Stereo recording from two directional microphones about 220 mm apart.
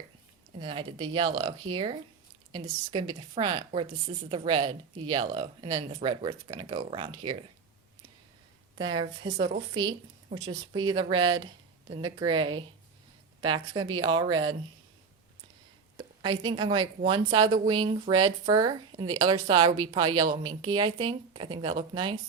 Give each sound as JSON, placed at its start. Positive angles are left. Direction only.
{"t": 0.6, "sound": "speech", "side_deg": -25}
{"t": 8.8, "sound": "speech", "side_deg": -20}
{"t": 16.2, "sound": "speech", "side_deg": -20}